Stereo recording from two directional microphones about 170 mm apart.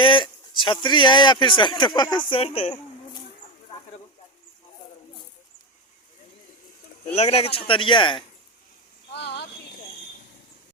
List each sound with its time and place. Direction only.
0.0 s speech: 30° left (ahead or behind)
7.1 s speech: 40° left (ahead or behind)
9.1 s a sound: 75° left (ahead or behind)